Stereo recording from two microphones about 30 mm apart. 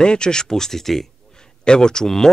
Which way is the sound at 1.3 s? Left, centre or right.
Left.